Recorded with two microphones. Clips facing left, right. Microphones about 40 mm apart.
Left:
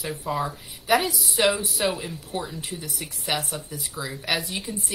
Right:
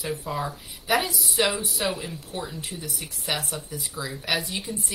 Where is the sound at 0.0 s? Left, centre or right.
Centre.